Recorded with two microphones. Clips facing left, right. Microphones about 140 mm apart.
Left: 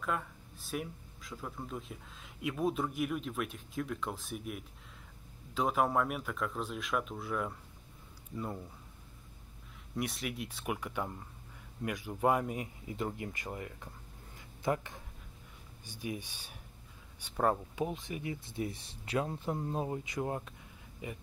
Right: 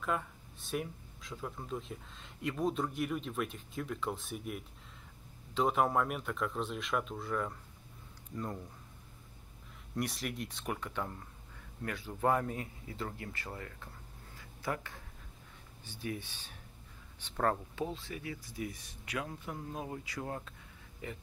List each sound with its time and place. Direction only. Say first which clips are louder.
0.0 s speech: right 1 dB; centre (ahead or behind)
9.9 s speech: even; centre (ahead or behind); by 13.8 s 15° left (ahead or behind)
14.3 s a sound: left 5 dB; 20° left (ahead or behind)
15.8 s speech: even; 15° left (ahead or behind)